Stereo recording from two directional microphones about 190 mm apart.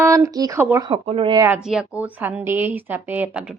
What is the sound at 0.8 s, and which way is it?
Speech, 30° right (ahead or behind).